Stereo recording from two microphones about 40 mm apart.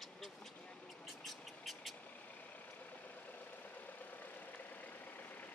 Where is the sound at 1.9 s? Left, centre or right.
Left.